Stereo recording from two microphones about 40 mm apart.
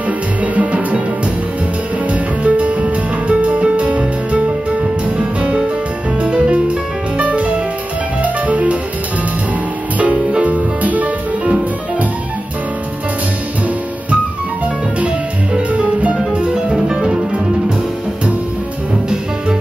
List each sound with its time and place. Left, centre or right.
0.4 s music: right
2.1 s music: right
10.4 s music: right
15.5 s music: right